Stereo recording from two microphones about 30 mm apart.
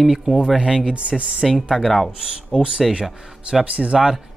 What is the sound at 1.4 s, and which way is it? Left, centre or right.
Speech, centre.